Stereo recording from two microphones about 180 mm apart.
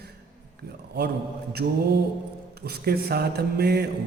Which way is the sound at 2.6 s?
60° right (ahead or behind).